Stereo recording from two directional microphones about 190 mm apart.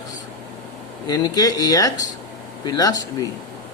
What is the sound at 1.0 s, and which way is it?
Speech, 20° left (ahead or behind).